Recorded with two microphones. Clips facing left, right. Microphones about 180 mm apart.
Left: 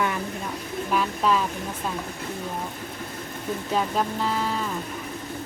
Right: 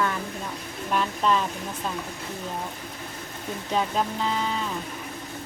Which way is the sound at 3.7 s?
5° left (ahead or behind).